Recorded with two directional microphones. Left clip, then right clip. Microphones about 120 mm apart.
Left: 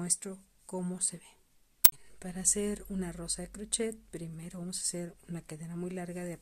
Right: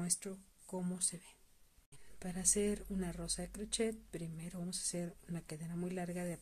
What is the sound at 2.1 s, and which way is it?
Speech, 20° left (ahead or behind).